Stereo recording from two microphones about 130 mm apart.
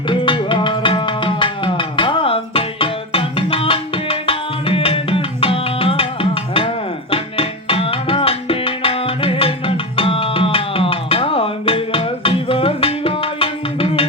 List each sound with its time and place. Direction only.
0.1 s music: 40° left (ahead or behind)
7.1 s tabla: 45° left (ahead or behind)